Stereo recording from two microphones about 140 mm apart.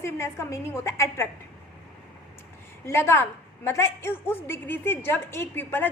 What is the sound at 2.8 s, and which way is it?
A woman's voice, 20° left (ahead or behind).